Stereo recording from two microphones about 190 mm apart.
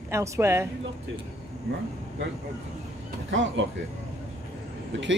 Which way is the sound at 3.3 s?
75° right (ahead or behind).